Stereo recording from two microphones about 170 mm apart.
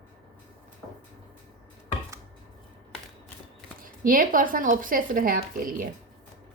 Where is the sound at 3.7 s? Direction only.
55° right (ahead or behind).